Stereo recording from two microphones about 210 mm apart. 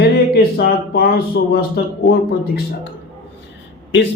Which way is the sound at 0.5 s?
45° left (ahead or behind).